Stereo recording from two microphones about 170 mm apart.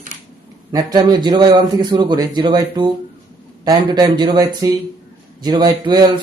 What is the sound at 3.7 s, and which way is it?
A man's voice, 25° right (ahead or behind).